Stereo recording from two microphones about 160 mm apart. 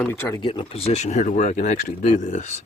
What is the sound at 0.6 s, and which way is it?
Speech, 40° left (ahead or behind).